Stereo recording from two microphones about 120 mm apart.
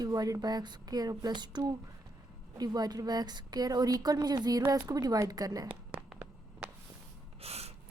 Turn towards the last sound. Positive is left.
turn(degrees=-60)  # may be behind; listen again after turning